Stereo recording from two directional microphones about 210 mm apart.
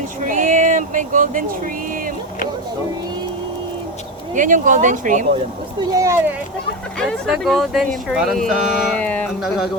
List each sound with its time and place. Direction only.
0.3 s a sound: 40° right (ahead or behind)
4.4 s speech: 40° right (ahead or behind)
5.9 s speech: 15° right (ahead or behind)
7.0 s speech: centre (ahead or behind)